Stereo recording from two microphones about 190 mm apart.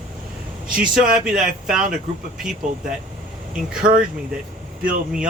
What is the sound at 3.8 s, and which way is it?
Speech, 45° right (ahead or behind).